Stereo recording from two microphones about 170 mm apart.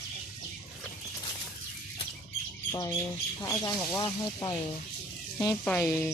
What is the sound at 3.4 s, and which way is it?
Speech, 20° left (ahead or behind).